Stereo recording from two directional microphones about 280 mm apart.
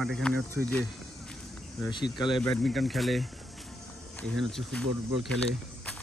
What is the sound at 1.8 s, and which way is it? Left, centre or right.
Speech, centre.